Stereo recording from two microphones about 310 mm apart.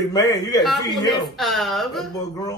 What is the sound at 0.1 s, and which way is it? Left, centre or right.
Speech, centre.